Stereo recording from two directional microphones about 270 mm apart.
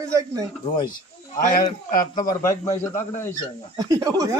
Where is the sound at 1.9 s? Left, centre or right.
Left.